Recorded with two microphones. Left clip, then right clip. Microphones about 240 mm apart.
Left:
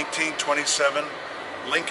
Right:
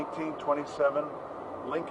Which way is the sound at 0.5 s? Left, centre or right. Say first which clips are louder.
Left 4 dB; centre.